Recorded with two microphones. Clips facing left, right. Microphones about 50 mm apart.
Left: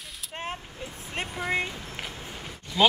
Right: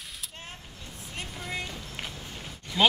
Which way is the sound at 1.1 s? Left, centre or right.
Left.